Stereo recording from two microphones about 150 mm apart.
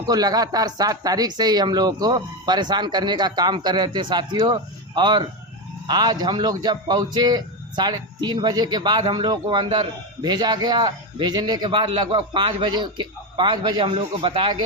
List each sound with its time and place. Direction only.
0.1 s a man's voice: 25° right (ahead or behind)